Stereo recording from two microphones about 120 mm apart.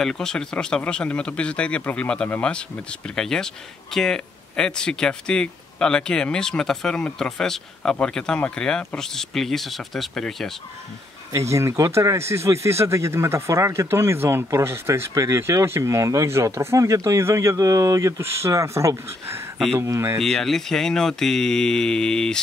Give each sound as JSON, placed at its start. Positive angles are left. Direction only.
{"t": 0.0, "sound": "speech", "side_deg": 5}
{"t": 11.3, "sound": "speech", "side_deg": -25}
{"t": 20.2, "sound": "speech", "side_deg": 5}